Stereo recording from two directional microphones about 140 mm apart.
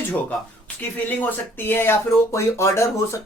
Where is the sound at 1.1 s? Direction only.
15° left (ahead or behind).